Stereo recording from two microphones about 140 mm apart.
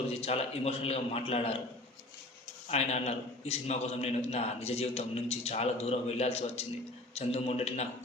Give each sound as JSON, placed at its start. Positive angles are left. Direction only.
{"t": 0.1, "sound": "a man's voice", "side_deg": 45}
{"t": 2.6, "sound": "a man's voice", "side_deg": 50}